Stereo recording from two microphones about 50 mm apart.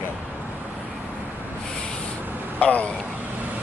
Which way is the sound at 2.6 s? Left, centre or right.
Left.